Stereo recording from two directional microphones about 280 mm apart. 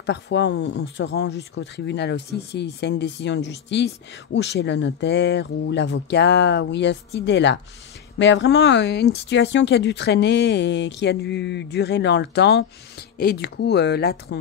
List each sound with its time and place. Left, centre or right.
0.0 s speech: left